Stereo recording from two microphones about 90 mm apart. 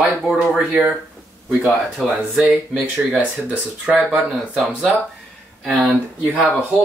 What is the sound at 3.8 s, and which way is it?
Speech, 15° right (ahead or behind).